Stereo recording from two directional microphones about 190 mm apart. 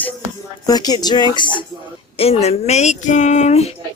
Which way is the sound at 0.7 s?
20° left (ahead or behind).